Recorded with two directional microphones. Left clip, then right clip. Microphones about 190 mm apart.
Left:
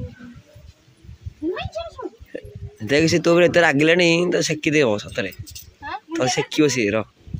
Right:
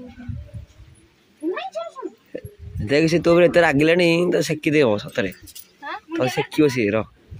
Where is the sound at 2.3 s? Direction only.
Centre (ahead or behind).